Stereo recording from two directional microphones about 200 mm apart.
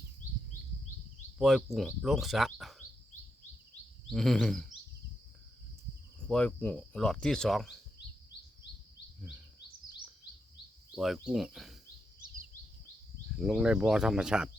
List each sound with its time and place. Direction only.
1.4 s speech: centre (ahead or behind)
4.1 s speech: centre (ahead or behind)
6.2 s speech: 5° left (ahead or behind)
10.9 s speech: centre (ahead or behind)
13.3 s speech: 5° right (ahead or behind)